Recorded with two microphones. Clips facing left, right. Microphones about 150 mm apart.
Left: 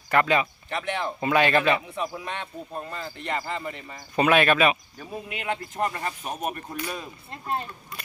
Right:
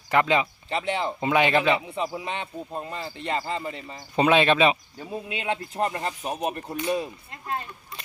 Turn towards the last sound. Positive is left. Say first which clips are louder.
# left 2 dB
turn(degrees=30)  # may be behind; listen again after turning